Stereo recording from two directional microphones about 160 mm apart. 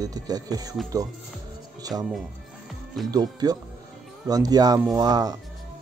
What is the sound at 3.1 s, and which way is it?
Speech, 25° right (ahead or behind).